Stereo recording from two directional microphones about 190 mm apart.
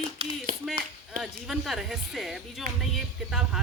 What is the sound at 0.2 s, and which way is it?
Clapping, 30° right (ahead or behind).